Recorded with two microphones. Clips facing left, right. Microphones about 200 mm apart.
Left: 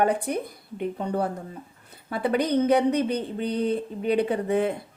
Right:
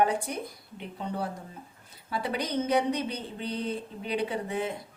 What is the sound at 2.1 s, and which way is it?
A woman's voice, 55° left (ahead or behind).